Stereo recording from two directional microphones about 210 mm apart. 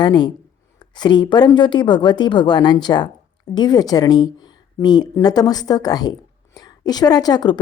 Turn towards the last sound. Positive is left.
turn(degrees=20)  # may be behind; listen again after turning